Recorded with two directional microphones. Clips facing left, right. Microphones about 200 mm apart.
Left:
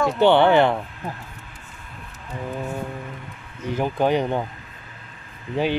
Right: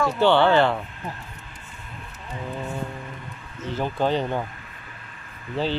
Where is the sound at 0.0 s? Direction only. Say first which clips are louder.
Left 2 dB; 20° left (ahead or behind).